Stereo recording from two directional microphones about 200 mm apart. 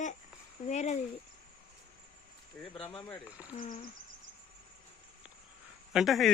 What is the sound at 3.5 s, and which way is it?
Speech, 40° left (ahead or behind).